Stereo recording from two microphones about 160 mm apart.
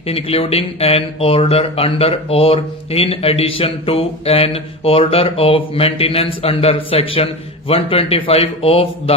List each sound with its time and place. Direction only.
0.1 s speech: 35° left (ahead or behind)